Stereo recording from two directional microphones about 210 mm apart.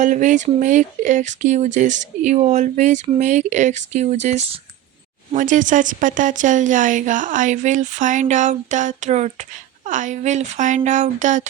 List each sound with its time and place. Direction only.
0.0 s speech: 35° right (ahead or behind)